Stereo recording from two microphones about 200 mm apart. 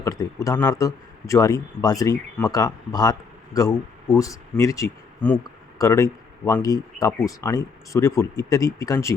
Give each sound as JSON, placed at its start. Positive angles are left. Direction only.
{"t": 0.0, "sound": "speech", "side_deg": 15}